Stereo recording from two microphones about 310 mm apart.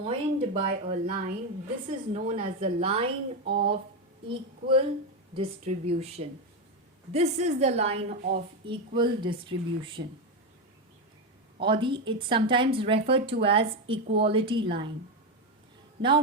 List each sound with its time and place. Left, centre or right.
0.0 s a woman's voice: centre
4.3 s a woman's voice: centre
11.6 s speech: centre
16.0 s speech: centre